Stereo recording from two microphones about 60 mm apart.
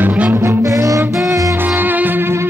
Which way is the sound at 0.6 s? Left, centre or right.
Right.